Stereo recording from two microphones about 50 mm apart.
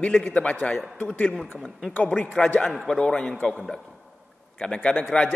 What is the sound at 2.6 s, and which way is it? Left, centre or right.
A man's voice, centre.